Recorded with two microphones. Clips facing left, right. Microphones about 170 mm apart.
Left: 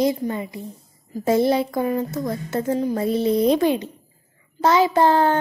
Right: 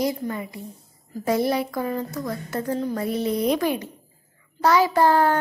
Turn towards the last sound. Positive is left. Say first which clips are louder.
# left 1 dB
turn(degrees=25)  # may be behind; listen again after turning